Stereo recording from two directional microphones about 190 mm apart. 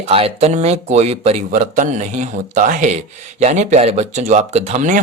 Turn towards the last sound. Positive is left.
turn(degrees=-40)  # may be behind; listen again after turning